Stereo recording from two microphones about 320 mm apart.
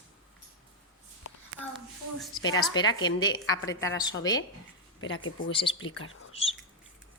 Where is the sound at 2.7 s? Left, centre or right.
Centre.